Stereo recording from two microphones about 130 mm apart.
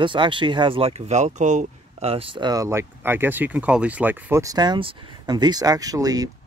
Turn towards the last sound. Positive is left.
turn(degrees=-30)  # may be behind; listen again after turning